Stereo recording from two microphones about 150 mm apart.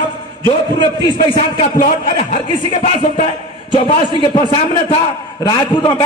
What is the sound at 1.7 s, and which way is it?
Speech, 60° left (ahead or behind).